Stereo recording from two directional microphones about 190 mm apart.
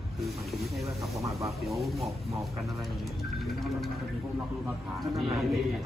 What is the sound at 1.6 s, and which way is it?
Speech, centre (ahead or behind).